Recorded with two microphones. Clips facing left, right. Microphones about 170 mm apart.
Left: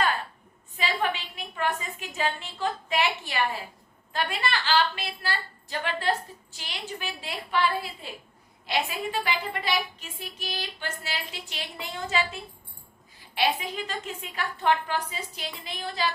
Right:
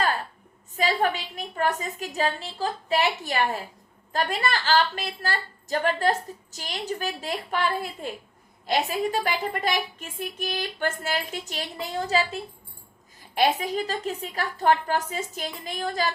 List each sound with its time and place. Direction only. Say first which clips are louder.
0.8 s a woman's voice: right 4 dB; 40° right (ahead or behind)